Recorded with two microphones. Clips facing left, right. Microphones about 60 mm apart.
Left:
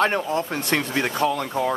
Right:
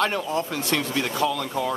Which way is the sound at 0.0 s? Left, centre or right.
Left.